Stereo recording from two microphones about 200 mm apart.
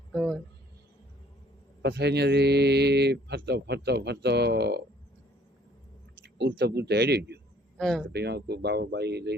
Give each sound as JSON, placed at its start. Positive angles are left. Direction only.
{"t": 0.1, "sound": "a sound", "side_deg": 5}
{"t": 1.8, "sound": "speech", "side_deg": -55}
{"t": 6.2, "sound": "speech", "side_deg": -60}
{"t": 7.8, "sound": "speech", "side_deg": 0}
{"t": 8.1, "sound": "speech", "side_deg": -55}